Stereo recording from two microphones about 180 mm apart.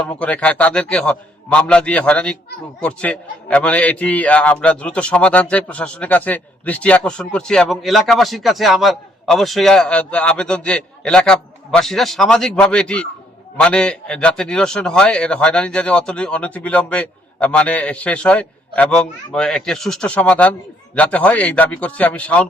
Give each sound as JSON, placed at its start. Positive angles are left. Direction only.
{"t": 0.1, "sound": "a man's voice", "side_deg": 5}